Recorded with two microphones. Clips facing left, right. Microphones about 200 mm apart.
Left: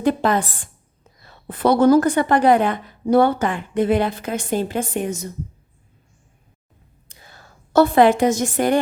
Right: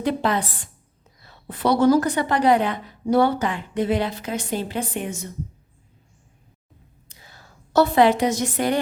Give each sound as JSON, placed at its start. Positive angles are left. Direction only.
{"t": 0.0, "sound": "a woman's voice", "side_deg": 45}
{"t": 7.1, "sound": "a woman's voice", "side_deg": 50}